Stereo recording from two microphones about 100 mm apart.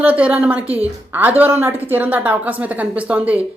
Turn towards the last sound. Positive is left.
turn(degrees=-15)  # may be behind; listen again after turning